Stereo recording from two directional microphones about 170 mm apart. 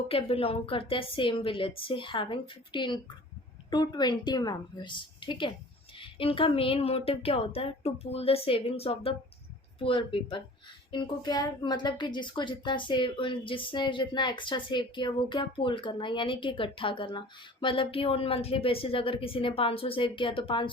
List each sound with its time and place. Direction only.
0.1 s a woman's voice: 35° left (ahead or behind)